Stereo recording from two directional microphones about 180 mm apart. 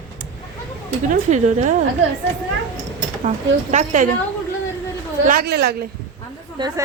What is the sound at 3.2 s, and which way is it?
Speech, 40° right (ahead or behind).